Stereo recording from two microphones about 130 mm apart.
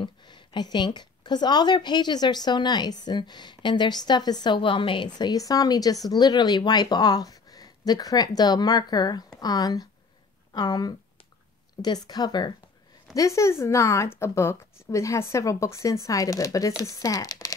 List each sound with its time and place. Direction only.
0.0 s a woman's voice: 35° left (ahead or behind)